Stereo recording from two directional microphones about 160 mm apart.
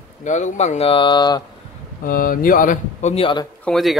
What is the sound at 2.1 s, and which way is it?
Speech, 60° left (ahead or behind).